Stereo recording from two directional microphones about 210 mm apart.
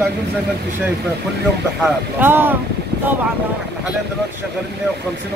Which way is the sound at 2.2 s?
10° right (ahead or behind).